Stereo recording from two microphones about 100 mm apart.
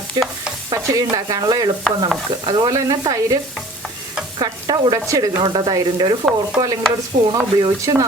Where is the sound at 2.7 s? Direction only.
30° right (ahead or behind).